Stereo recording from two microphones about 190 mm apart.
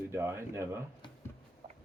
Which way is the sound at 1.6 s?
30° right (ahead or behind).